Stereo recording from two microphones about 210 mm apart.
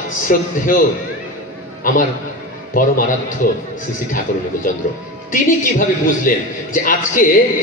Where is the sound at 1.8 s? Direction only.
40° left (ahead or behind).